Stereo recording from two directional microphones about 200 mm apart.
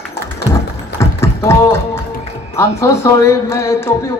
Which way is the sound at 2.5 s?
15° left (ahead or behind).